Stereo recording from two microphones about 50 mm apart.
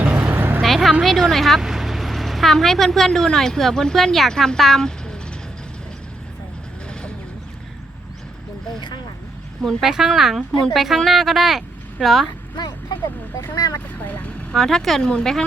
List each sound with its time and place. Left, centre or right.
0.0 s vehicle: right
0.6 s a sound: centre
1.0 s speech: centre
9.8 s speech: centre
14.0 s speech: left
14.5 s speech: centre